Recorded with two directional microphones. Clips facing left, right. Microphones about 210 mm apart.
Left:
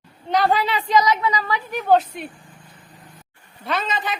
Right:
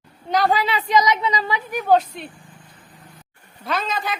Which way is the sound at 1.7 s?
Centre (ahead or behind).